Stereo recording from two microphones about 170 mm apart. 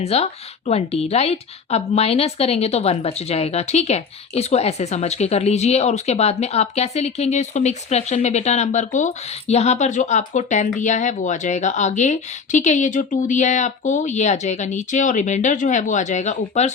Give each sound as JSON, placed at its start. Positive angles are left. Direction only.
{"t": 0.0, "sound": "a woman's voice", "side_deg": 40}